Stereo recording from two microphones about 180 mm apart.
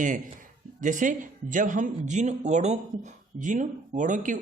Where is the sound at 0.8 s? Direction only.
45° right (ahead or behind).